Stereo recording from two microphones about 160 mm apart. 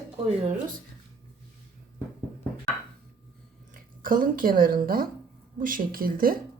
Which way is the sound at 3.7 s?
60° right (ahead or behind).